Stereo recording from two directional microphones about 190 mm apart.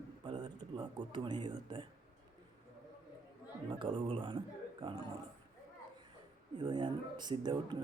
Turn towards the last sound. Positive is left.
turn(degrees=-20)  # may be behind; listen again after turning